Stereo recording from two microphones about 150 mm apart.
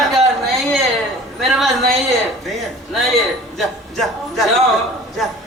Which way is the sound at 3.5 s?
Centre (ahead or behind).